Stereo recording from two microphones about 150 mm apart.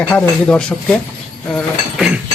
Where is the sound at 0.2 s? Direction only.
5° left (ahead or behind).